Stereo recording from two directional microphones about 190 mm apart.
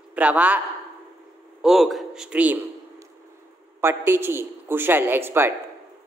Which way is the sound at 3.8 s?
10° right (ahead or behind).